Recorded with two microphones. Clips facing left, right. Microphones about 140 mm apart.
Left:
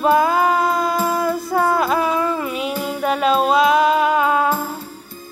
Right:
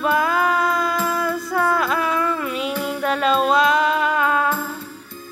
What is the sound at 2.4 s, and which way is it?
Music, 5° left (ahead or behind).